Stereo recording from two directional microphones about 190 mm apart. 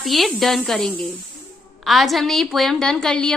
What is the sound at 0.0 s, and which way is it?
A woman's voice, centre (ahead or behind).